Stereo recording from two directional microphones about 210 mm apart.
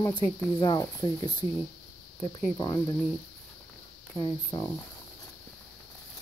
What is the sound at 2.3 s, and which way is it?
Cricket, 20° left (ahead or behind).